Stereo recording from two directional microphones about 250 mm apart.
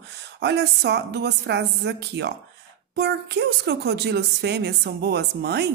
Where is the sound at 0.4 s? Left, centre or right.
Right.